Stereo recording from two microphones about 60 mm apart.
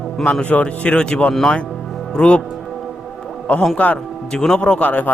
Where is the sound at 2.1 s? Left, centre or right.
Centre.